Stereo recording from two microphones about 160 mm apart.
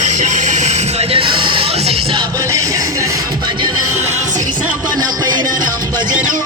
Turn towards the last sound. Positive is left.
turn(degrees=-25)  # may be behind; listen again after turning